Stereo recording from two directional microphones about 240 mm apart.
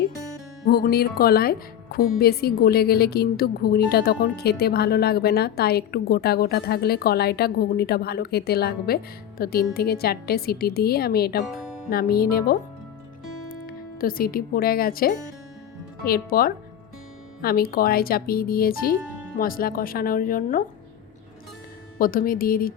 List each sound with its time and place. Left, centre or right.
0.6 s speech: left
13.7 s speech: left
21.9 s speech: left